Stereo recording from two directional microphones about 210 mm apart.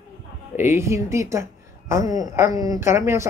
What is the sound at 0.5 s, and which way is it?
A woman's voice, 10° right (ahead or behind).